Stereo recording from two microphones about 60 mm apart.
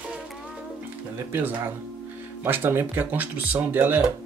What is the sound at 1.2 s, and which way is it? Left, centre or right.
Speech, right.